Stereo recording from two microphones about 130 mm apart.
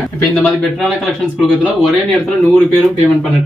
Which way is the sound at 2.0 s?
Centre (ahead or behind).